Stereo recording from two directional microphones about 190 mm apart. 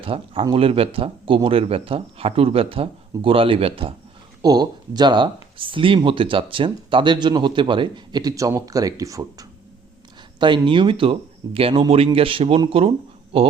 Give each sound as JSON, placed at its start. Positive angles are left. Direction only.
{"t": 0.0, "sound": "speech", "side_deg": -30}